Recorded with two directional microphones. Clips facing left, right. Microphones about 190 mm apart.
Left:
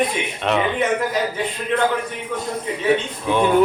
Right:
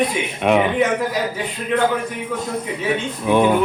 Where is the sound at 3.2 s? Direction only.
15° right (ahead or behind).